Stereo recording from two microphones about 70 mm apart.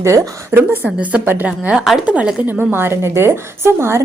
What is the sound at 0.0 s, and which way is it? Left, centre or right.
Speech, right.